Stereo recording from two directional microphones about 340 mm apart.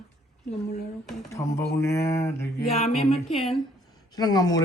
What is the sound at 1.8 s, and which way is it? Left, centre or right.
Speech, centre.